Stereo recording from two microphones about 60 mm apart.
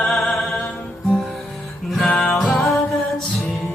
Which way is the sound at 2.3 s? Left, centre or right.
Centre.